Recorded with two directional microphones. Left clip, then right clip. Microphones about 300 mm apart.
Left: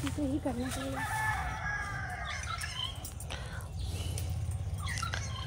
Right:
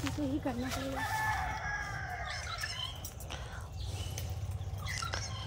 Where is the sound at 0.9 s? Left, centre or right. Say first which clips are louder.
Even; right.